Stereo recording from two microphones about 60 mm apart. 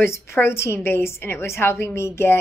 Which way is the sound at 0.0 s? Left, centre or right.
Left.